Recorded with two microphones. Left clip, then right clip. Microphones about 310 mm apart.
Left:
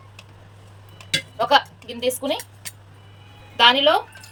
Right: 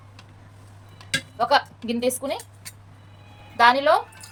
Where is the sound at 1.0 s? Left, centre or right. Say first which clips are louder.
Left 2 dB; right.